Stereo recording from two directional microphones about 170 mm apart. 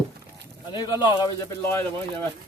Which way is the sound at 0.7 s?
25° left (ahead or behind).